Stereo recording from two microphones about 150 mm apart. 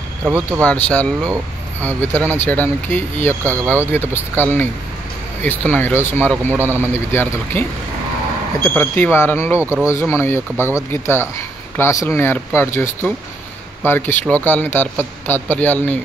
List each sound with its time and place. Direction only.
0.2 s speech: 15° right (ahead or behind)
0.8 s speech: 10° left (ahead or behind)
3.4 s speech: 15° right (ahead or behind)
3.9 s speech: 15° left (ahead or behind)
6.5 s speech: 15° right (ahead or behind)
6.8 s speech: 15° left (ahead or behind)
8.6 s speech: 15° left (ahead or behind)
9.6 s speech: 10° right (ahead or behind)
9.8 s speech: 15° left (ahead or behind)